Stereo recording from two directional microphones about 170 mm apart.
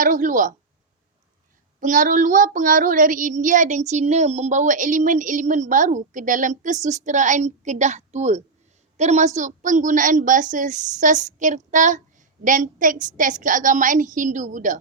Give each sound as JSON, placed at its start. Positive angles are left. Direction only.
{"t": 0.0, "sound": "child singing", "side_deg": -50}
{"t": 1.8, "sound": "child singing", "side_deg": -50}